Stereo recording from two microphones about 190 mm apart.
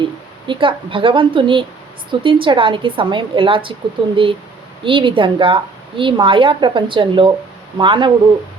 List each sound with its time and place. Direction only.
0.0 s a woman's voice: 25° right (ahead or behind)